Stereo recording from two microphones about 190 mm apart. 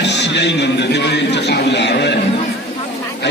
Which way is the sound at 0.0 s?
65° left (ahead or behind).